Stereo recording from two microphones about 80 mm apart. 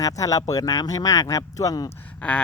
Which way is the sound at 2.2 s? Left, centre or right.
Centre.